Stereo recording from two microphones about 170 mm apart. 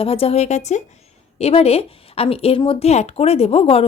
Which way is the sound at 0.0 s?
35° left (ahead or behind).